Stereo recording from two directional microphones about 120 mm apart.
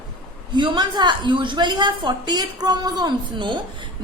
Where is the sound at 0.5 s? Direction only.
40° right (ahead or behind).